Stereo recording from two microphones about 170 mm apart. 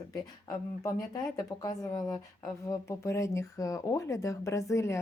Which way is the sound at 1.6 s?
20° left (ahead or behind).